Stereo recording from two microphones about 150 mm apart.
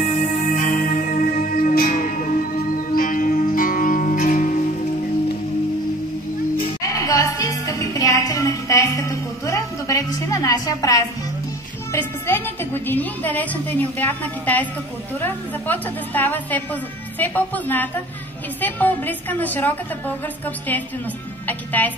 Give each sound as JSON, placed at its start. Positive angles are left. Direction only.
{"t": 0.1, "sound": "music", "side_deg": 60}
{"t": 6.8, "sound": "music", "side_deg": 20}
{"t": 15.1, "sound": "a woman's voice", "side_deg": 15}
{"t": 21.5, "sound": "a woman's voice", "side_deg": 10}